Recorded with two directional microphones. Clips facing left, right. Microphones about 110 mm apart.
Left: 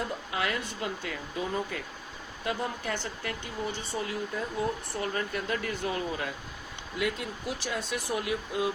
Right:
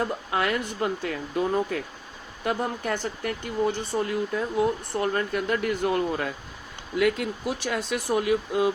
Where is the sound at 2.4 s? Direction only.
55° right (ahead or behind).